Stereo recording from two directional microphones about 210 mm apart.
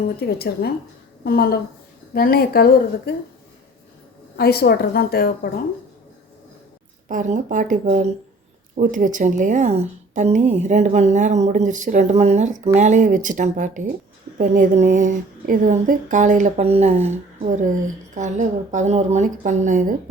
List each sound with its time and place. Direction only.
0.2 s a woman's voice: 50° left (ahead or behind)
4.4 s a woman's voice: 45° left (ahead or behind)
7.1 s speech: 35° right (ahead or behind)